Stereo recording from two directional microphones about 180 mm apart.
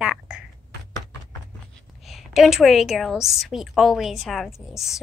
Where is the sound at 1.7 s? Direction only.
Centre (ahead or behind).